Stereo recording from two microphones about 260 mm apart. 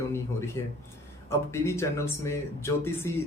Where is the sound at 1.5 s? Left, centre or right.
Centre.